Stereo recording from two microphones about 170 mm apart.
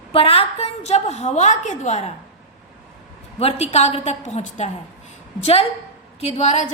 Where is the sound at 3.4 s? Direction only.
40° left (ahead or behind).